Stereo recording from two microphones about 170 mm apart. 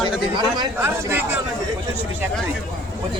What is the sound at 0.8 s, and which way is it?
Speech, 10° right (ahead or behind).